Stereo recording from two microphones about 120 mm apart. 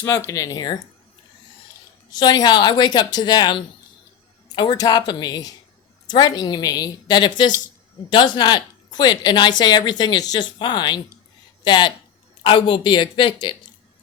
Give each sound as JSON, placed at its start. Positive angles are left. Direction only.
{"t": 0.3, "sound": "a woman's voice", "side_deg": 30}
{"t": 2.1, "sound": "a woman's voice", "side_deg": 35}